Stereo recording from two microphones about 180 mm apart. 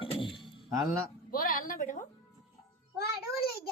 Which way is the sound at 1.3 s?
55° left (ahead or behind).